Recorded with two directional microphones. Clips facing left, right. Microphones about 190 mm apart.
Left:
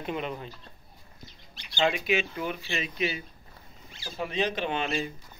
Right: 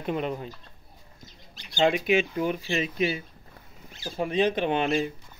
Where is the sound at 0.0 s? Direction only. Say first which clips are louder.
Right 4 dB; 45° right (ahead or behind).